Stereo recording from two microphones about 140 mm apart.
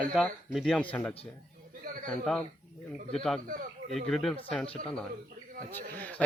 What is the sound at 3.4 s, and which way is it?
Speech, 55° right (ahead or behind).